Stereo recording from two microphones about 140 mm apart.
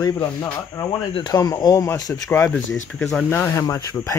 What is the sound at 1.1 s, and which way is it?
Speech, 30° left (ahead or behind).